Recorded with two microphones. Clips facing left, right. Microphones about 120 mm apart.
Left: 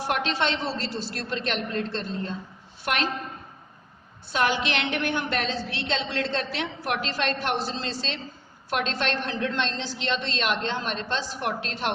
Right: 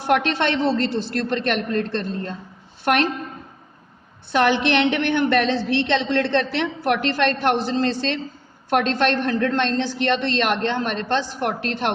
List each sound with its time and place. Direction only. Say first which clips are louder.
0.1 s a woman's voice: right 7 dB; 65° right (ahead or behind)
4.3 s a woman's voice: right 7 dB; 65° right (ahead or behind)